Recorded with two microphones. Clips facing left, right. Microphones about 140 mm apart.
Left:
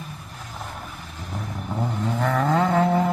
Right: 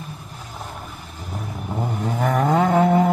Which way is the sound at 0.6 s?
5° right (ahead or behind).